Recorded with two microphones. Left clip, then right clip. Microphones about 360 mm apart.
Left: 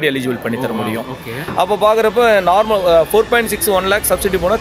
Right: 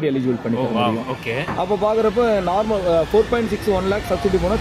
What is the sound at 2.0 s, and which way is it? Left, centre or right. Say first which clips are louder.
Speech: left 6 dB; left.